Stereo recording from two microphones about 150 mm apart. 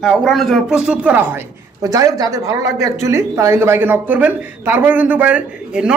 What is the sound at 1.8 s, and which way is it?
Speech, 25° right (ahead or behind).